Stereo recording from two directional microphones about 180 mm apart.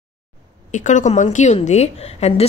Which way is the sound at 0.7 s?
40° left (ahead or behind).